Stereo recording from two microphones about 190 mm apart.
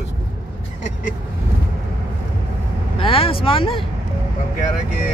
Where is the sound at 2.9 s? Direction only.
30° left (ahead or behind).